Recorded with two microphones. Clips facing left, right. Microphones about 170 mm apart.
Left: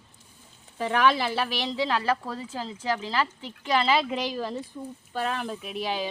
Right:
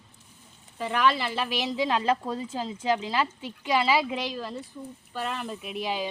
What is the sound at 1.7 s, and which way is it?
Speech, 15° right (ahead or behind).